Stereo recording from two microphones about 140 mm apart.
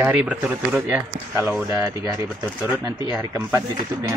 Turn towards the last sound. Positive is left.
turn(degrees=-10)  # may be behind; listen again after turning